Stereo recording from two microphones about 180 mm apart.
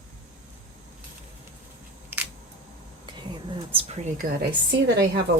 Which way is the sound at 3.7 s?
35° right (ahead or behind).